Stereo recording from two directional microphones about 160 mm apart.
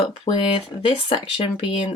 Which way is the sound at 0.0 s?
35° left (ahead or behind).